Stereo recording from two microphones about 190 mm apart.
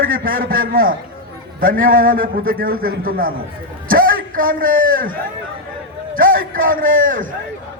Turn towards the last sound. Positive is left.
turn(degrees=-45)  # may be behind; listen again after turning